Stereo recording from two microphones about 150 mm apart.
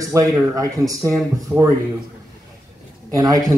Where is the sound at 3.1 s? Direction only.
25° right (ahead or behind).